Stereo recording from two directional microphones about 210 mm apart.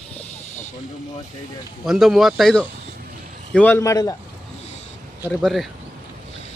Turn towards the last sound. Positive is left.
turn(degrees=0)  # may be behind; listen again after turning